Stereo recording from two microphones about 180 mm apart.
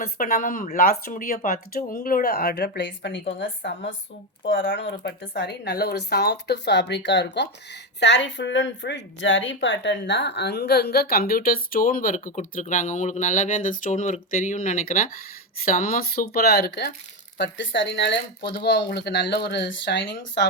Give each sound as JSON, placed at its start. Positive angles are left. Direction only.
{"t": 0.0, "sound": "a woman's voice", "side_deg": 50}
{"t": 17.3, "sound": "speech", "side_deg": 80}